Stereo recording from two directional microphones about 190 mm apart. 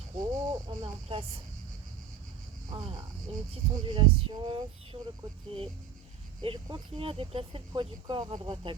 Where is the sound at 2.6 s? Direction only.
25° right (ahead or behind).